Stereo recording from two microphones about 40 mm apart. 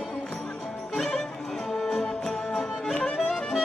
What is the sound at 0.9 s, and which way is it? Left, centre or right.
Music, centre.